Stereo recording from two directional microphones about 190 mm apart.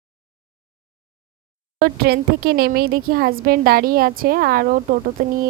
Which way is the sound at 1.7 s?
55° right (ahead or behind).